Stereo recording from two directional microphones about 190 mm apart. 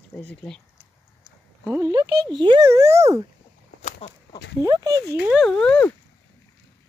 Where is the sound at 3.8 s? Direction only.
35° left (ahead or behind).